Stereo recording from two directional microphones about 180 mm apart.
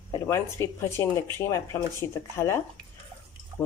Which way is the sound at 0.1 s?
15° left (ahead or behind).